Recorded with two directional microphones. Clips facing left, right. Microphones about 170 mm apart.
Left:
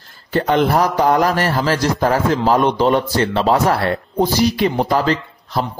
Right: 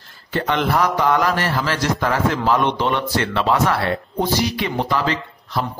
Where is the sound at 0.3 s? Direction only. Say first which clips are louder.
Left 5 dB; 40° left (ahead or behind).